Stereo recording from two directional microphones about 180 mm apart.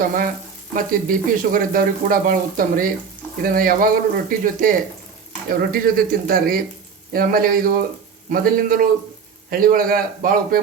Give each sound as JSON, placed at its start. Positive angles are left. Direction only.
{"t": 0.0, "sound": "speech", "side_deg": -50}